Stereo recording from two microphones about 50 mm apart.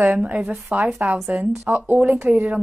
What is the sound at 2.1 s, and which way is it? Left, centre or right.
Speech, right.